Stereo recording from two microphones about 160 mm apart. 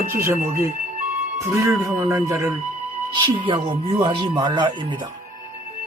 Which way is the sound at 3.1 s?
30° right (ahead or behind).